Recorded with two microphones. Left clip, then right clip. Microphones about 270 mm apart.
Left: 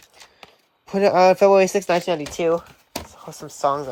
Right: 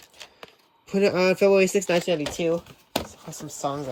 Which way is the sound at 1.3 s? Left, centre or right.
Left.